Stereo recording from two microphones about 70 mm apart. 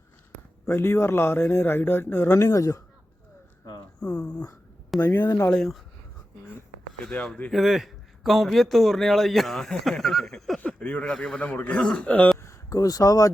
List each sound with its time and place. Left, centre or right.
0.7 s a man's voice: left
2.2 s speech: left
4.0 s speech: centre
4.9 s speech: left
7.0 s speech: centre
7.5 s a man's voice: centre
10.6 s a sound: left
11.0 s a man's voice: centre
12.4 s speech: left